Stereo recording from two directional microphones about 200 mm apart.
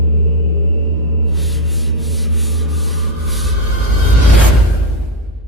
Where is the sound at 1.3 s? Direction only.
Centre (ahead or behind).